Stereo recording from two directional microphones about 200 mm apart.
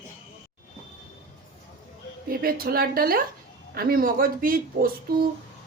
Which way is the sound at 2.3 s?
45° right (ahead or behind).